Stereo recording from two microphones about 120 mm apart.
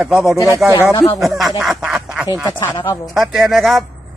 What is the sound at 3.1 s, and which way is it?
Speech, centre (ahead or behind).